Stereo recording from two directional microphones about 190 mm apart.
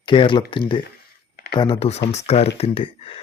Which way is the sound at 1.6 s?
25° left (ahead or behind).